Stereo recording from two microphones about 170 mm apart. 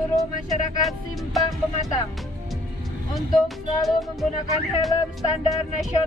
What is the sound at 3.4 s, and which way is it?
Speech, centre (ahead or behind).